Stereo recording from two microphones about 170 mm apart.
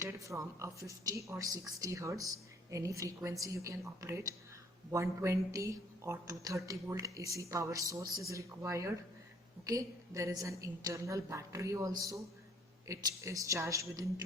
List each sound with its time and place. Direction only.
0.0 s a woman's voice: 15° right (ahead or behind)